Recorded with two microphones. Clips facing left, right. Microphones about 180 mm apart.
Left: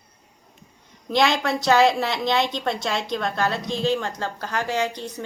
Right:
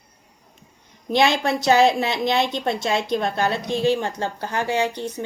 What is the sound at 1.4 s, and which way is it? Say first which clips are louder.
A woman's voice: right 1 dB; 25° right (ahead or behind).